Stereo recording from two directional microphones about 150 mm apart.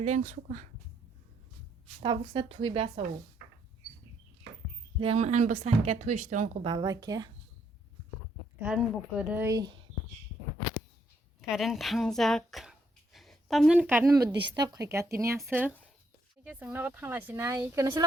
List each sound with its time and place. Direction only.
0.0 s speech: 50° right (ahead or behind)
2.0 s speech: 40° right (ahead or behind)
4.9 s speech: 45° right (ahead or behind)
6.6 s speech: 30° right (ahead or behind)
8.6 s speech: 5° right (ahead or behind)
9.5 s speech: 25° right (ahead or behind)
11.3 s a woman's voice: centre (ahead or behind)
13.1 s a sound: centre (ahead or behind)
13.7 s speech: 15° right (ahead or behind)
14.1 s speech: 25° right (ahead or behind)